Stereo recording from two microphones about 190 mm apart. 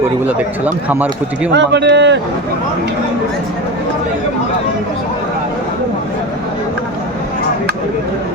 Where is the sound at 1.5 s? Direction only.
65° right (ahead or behind).